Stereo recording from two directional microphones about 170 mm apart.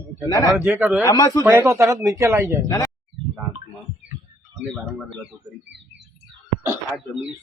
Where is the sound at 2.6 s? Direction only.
15° left (ahead or behind).